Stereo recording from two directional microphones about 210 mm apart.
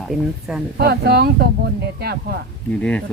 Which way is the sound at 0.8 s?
50° right (ahead or behind).